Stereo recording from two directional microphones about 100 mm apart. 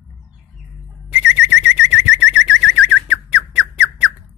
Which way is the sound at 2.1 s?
10° right (ahead or behind).